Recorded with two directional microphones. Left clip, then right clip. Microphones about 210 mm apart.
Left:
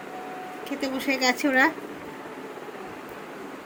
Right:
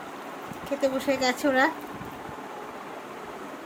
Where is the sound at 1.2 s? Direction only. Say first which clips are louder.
Left 3 dB; 5° right (ahead or behind).